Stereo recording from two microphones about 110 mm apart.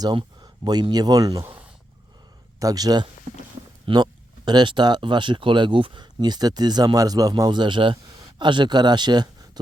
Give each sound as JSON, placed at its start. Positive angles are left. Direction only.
{"t": 0.0, "sound": "speech", "side_deg": -40}
{"t": 2.6, "sound": "speech", "side_deg": -35}